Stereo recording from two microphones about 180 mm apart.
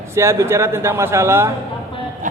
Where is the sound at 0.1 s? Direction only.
15° right (ahead or behind).